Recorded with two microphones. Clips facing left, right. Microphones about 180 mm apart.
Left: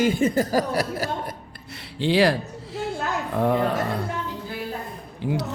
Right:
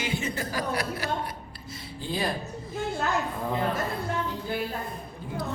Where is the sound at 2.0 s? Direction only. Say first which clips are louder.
Left 11 dB; 80° left.